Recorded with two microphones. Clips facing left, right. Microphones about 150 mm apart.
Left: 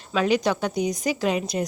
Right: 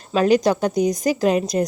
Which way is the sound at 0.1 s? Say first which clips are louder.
Right 5 dB; 40° right (ahead or behind).